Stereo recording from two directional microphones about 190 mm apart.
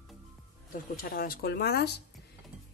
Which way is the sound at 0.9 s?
50° left (ahead or behind).